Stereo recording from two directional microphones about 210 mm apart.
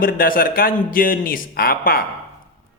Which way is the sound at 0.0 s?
45° left (ahead or behind).